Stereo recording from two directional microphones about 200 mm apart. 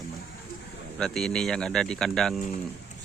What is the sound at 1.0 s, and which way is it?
Speech, 5° left (ahead or behind).